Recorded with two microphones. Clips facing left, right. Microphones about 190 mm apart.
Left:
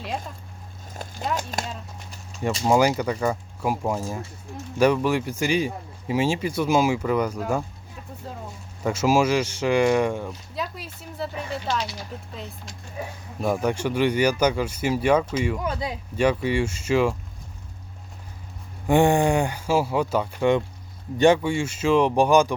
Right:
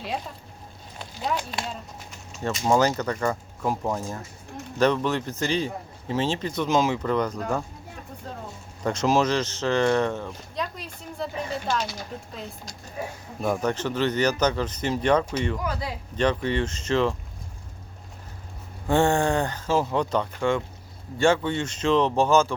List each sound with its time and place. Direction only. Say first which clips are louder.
1.0 s speech: even; 45° left (ahead or behind)
2.6 s speech: left 2 dB; 10° left (ahead or behind)
8.8 s speech: left 2 dB; 5° left (ahead or behind)
13.4 s speech: left 2 dB; 5° left (ahead or behind)
15.6 s speech: left 2 dB; 25° left (ahead or behind)
16.1 s speech: left 2 dB; 10° left (ahead or behind)
18.9 s speech: left 3 dB; 15° left (ahead or behind)
20.4 s speech: left 4 dB; 20° left (ahead or behind)